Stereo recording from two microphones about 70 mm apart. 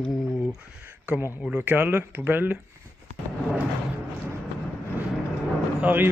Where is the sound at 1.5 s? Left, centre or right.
Right.